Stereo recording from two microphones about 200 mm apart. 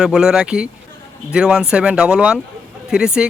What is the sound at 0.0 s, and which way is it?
A man's voice, 5° right (ahead or behind).